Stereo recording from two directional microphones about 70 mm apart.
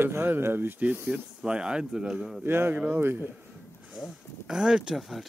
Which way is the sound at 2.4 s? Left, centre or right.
Right.